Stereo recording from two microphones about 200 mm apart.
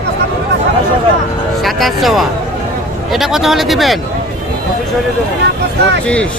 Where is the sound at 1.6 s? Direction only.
Centre (ahead or behind).